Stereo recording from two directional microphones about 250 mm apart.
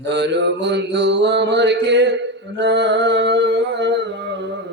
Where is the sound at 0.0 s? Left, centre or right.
Right.